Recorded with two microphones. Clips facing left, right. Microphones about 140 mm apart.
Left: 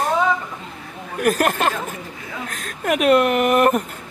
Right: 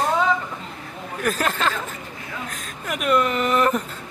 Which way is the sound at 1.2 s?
50° left (ahead or behind).